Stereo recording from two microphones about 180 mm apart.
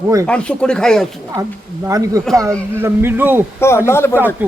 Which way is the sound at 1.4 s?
20° right (ahead or behind).